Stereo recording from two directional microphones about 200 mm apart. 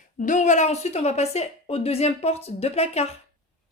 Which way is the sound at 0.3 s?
35° left (ahead or behind).